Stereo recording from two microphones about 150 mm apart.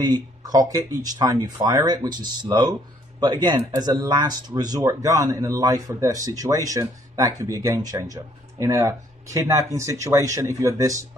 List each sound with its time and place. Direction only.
0.0 s speech: 25° right (ahead or behind)